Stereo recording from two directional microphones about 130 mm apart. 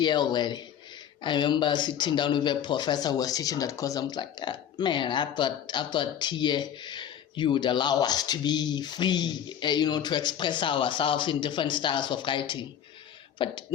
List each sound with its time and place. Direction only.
0.0 s speech: 35° left (ahead or behind)